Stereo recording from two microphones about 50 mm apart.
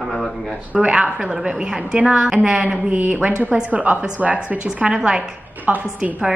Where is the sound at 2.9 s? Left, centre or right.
Right.